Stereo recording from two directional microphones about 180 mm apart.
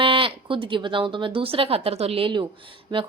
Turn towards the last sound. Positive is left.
turn(degrees=-25)  # may be behind; listen again after turning